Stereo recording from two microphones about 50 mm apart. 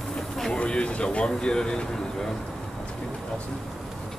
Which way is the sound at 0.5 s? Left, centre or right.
Left.